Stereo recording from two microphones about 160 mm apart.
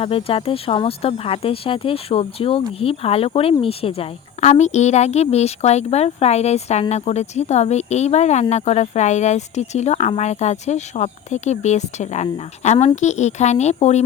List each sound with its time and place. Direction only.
0.0 s speech: 35° left (ahead or behind)